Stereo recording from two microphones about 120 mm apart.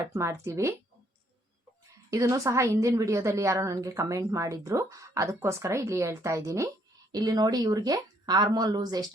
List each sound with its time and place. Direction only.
0.1 s a woman's voice: 25° right (ahead or behind)
2.0 s a woman's voice: 25° right (ahead or behind)